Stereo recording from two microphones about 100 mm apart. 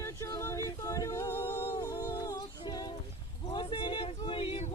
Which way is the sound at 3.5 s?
60° left (ahead or behind).